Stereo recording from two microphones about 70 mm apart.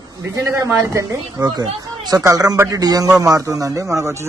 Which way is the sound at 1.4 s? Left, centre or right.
Right.